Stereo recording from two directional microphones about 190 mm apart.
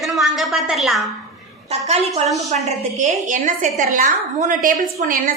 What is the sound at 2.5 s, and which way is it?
A woman's voice, 40° right (ahead or behind).